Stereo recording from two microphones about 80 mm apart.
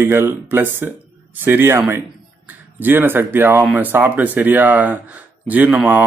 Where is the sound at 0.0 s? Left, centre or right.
Right.